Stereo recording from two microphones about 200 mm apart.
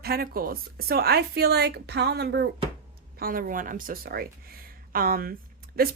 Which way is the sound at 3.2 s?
45° right (ahead or behind).